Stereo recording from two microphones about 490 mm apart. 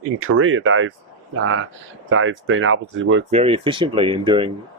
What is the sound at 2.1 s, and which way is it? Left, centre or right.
Speech, right.